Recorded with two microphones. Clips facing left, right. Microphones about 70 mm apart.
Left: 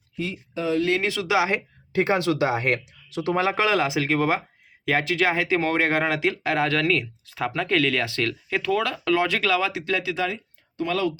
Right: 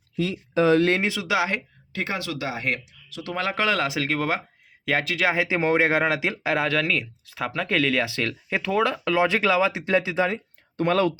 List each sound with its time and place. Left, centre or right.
0.5 s speech: right
1.0 s speech: centre
1.4 s speech: centre
1.9 s speech: left
3.3 s speech: centre; by 10.4 s right
10.8 s speech: right